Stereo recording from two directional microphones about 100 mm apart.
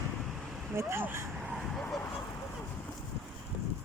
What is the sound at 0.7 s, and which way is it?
Speech, 25° right (ahead or behind).